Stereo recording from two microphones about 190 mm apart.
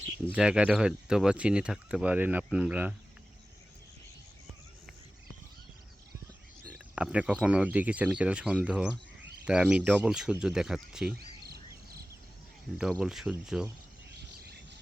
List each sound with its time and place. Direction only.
0.3 s speech: 5° right (ahead or behind)
6.7 s a sound: 5° right (ahead or behind)
7.4 s speech: 5° right (ahead or behind)
11.2 s bird: 55° right (ahead or behind)
12.8 s speech: centre (ahead or behind)